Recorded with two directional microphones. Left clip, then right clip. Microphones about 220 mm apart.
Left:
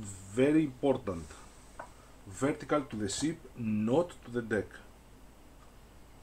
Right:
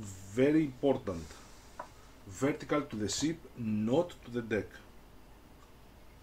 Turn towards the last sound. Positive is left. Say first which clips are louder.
# left 1 dB
turn(degrees=5)  # may be behind; listen again after turning